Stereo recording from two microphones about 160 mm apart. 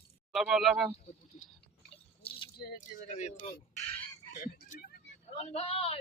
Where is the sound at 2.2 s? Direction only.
35° left (ahead or behind).